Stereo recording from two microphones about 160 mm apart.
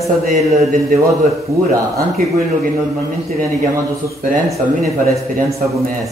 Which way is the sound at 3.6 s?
20° right (ahead or behind).